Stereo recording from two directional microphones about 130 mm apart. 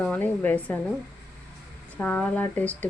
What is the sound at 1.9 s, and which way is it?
Speech, 10° left (ahead or behind).